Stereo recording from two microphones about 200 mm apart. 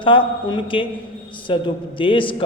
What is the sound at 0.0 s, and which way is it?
A man's voice, 25° left (ahead or behind).